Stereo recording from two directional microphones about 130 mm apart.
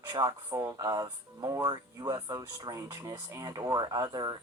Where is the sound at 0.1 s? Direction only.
35° right (ahead or behind).